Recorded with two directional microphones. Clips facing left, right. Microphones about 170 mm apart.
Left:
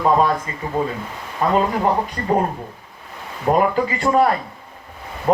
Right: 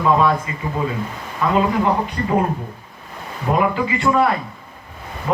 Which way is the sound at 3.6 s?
40° left (ahead or behind).